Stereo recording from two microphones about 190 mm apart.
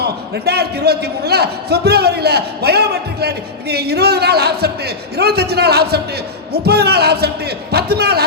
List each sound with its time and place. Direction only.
0.0 s a man's voice: 60° right (ahead or behind)